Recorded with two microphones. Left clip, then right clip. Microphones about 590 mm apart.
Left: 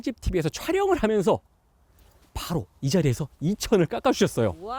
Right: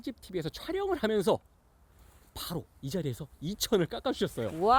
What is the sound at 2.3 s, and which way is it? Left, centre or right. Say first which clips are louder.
Speech: left 7 dB; left.